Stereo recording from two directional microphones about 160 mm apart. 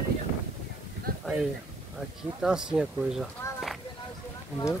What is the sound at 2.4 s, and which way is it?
Speech, 5° right (ahead or behind).